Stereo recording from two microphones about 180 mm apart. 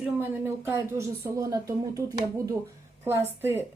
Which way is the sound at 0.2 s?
10° right (ahead or behind).